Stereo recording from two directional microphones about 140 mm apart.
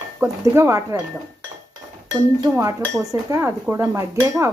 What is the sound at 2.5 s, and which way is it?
Speech, 20° right (ahead or behind).